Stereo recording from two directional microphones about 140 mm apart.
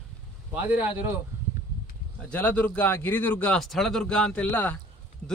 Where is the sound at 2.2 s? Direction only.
10° left (ahead or behind).